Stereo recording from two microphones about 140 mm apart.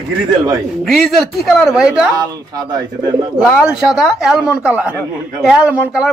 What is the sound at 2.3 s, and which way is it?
Speech, 30° right (ahead or behind).